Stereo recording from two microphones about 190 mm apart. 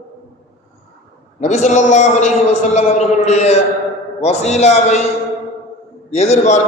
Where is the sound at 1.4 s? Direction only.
40° left (ahead or behind).